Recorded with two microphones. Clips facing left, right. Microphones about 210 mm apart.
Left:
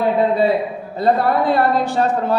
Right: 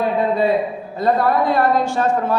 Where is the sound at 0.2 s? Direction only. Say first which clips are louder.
Left 1 dB; 30° left (ahead or behind).